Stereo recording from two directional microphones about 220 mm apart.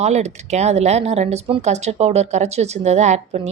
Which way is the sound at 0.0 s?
30° right (ahead or behind).